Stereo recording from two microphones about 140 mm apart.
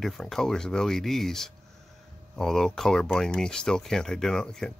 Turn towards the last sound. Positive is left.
turn(degrees=5)  # may be behind; listen again after turning